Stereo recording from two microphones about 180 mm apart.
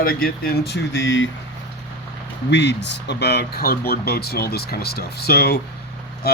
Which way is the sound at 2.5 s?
75° left (ahead or behind).